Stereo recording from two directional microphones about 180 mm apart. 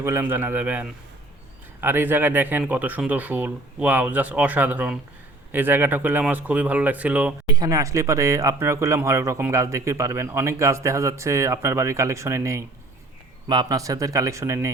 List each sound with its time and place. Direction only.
0.0 s speech: 15° right (ahead or behind)
7.5 s speech: 20° right (ahead or behind)